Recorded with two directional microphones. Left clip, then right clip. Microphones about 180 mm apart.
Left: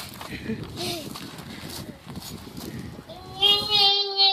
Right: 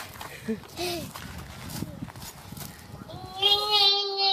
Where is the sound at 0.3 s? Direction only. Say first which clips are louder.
Left 1 dB; 15° right (ahead or behind).